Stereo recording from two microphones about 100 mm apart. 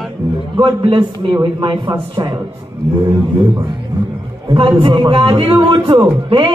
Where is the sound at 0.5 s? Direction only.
55° right (ahead or behind).